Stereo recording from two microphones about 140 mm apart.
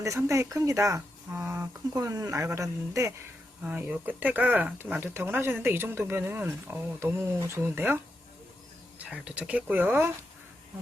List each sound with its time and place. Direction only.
0.0 s speech: 20° right (ahead or behind)
1.3 s a sound: 15° right (ahead or behind)
1.9 s speech: 25° right (ahead or behind)
3.6 s speech: 10° right (ahead or behind)
9.0 s speech: 10° right (ahead or behind)